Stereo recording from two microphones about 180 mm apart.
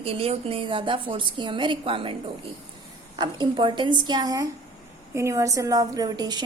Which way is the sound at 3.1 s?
25° right (ahead or behind).